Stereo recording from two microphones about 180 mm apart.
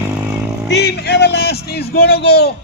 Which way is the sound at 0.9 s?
65° left (ahead or behind).